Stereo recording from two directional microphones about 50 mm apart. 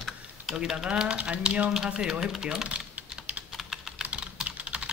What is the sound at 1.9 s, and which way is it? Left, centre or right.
Speech, centre.